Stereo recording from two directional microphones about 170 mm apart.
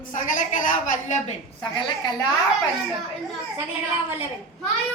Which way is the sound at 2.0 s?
25° left (ahead or behind).